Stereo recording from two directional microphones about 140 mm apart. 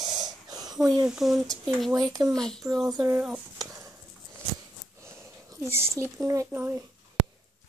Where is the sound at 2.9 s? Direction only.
20° right (ahead or behind).